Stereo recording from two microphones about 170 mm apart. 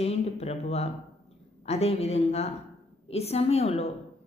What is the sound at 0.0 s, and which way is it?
Speech, 40° left (ahead or behind).